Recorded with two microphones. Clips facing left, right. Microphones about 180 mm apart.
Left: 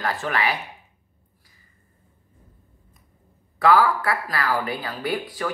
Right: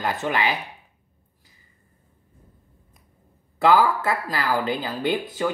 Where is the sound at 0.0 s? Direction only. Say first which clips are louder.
Right 1 dB; 20° right (ahead or behind).